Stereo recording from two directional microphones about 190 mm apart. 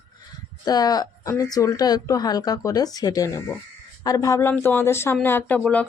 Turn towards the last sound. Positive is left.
turn(degrees=10)  # may be behind; listen again after turning